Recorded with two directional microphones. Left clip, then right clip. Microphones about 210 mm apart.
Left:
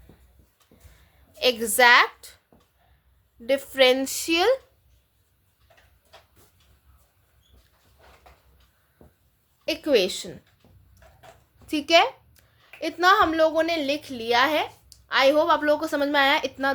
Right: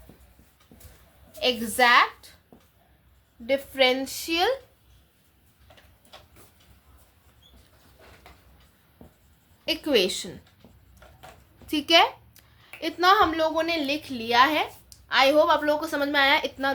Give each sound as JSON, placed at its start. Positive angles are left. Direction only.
{"t": 1.4, "sound": "a woman's voice", "side_deg": 45}
{"t": 3.4, "sound": "a woman's voice", "side_deg": 45}
{"t": 9.6, "sound": "a woman's voice", "side_deg": 20}
{"t": 11.6, "sound": "a woman's voice", "side_deg": 20}